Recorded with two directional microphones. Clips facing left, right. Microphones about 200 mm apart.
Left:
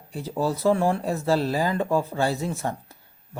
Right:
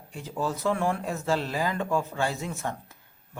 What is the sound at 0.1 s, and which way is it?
Speech, 35° left (ahead or behind).